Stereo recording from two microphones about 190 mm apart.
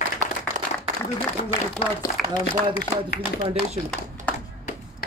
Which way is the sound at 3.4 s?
30° right (ahead or behind).